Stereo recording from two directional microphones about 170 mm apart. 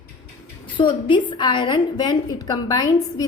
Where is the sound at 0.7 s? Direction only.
30° left (ahead or behind).